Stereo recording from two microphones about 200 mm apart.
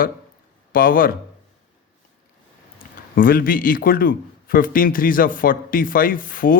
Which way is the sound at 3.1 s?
45° left (ahead or behind).